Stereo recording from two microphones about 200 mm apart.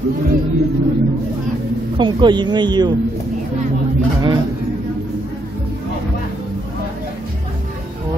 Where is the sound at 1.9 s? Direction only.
25° right (ahead or behind).